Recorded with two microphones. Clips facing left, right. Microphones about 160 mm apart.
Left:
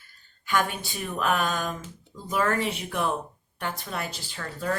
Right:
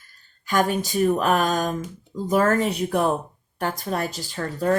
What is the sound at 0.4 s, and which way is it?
Speech, 40° right (ahead or behind).